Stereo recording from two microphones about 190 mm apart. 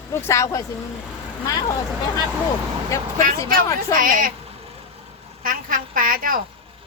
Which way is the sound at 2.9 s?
15° left (ahead or behind).